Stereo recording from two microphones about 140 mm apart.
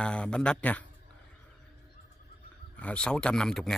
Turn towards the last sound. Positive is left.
turn(degrees=5)  # may be behind; listen again after turning